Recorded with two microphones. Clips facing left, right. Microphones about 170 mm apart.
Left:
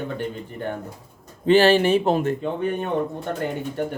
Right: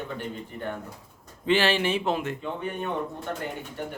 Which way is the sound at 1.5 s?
40° left (ahead or behind).